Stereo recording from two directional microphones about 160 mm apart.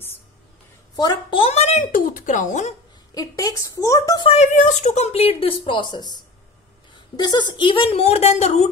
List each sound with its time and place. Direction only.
0.9 s a woman's voice: 25° left (ahead or behind)
1.4 s a woman's voice: 40° left (ahead or behind)
1.8 s speech: 60° left (ahead or behind)
3.2 s a woman's voice: 20° left (ahead or behind)
4.3 s a woman's voice: 45° left (ahead or behind)